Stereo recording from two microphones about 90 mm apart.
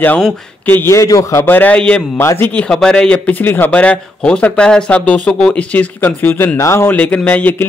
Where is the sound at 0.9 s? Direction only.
35° left (ahead or behind).